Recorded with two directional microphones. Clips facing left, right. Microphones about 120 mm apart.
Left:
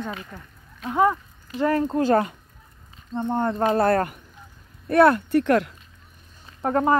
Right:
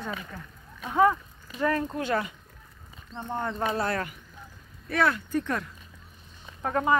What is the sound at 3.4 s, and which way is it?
Speech, 50° left (ahead or behind).